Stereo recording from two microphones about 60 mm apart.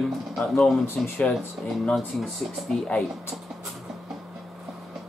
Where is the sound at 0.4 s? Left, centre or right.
Centre.